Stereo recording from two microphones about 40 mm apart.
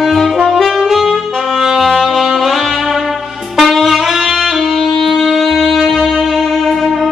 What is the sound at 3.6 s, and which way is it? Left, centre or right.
Saxophone, centre.